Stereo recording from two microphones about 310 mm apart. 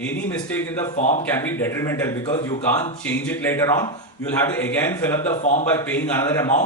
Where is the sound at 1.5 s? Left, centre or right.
Centre.